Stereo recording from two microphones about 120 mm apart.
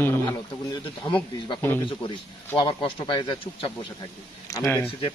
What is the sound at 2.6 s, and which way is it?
Speech, 45° left (ahead or behind).